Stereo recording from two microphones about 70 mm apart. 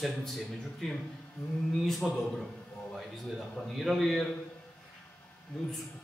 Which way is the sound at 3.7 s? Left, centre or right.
Centre.